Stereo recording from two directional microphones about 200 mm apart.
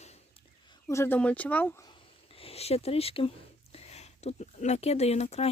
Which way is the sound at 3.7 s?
30° left (ahead or behind).